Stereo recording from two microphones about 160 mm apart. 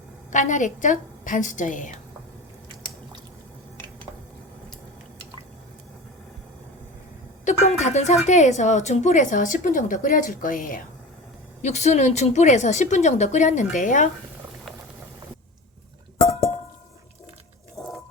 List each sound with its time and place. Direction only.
0.3 s speech: 50° left (ahead or behind)
7.4 s speech: 45° left (ahead or behind)
11.6 s speech: 45° left (ahead or behind)